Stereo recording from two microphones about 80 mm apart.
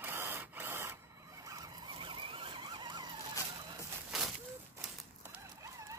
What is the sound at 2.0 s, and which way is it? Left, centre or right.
Vehicle, right.